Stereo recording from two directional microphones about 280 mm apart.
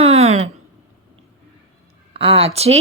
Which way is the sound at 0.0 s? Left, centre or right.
Right.